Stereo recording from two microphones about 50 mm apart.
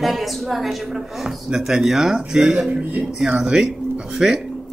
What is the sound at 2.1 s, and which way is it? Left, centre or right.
Speech, centre.